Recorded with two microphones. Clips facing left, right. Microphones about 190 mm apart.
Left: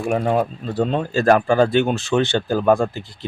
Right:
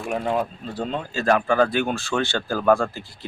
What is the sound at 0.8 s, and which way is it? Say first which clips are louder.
Speech: left 7 dB; 65° left (ahead or behind).